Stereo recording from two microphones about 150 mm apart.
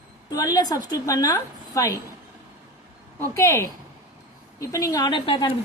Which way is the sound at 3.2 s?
20° left (ahead or behind).